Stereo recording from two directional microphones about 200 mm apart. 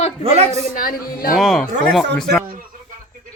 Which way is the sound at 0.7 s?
45° left (ahead or behind).